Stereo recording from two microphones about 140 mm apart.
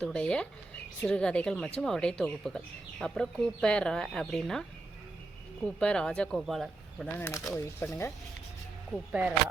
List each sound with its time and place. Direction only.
0.0 s speech: 10° left (ahead or behind)
5.8 s speech: 5° left (ahead or behind)
7.2 s speech: 15° left (ahead or behind)
8.9 s speech: 5° left (ahead or behind)